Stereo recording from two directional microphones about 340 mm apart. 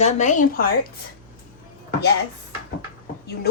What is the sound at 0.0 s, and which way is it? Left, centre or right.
Speech, left.